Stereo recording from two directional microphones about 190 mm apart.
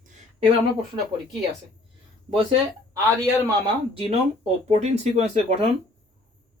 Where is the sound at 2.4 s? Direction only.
25° right (ahead or behind).